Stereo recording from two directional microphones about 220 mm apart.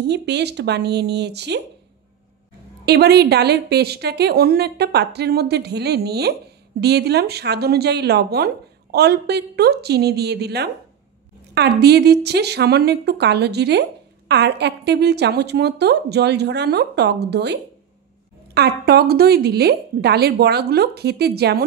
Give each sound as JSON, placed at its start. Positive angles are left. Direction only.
{"t": 0.0, "sound": "a woman's voice", "side_deg": -50}
{"t": 2.8, "sound": "a woman's voice", "side_deg": -45}